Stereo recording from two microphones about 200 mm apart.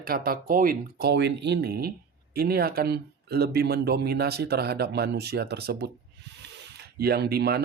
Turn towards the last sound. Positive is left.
turn(degrees=-50)  # may be behind; listen again after turning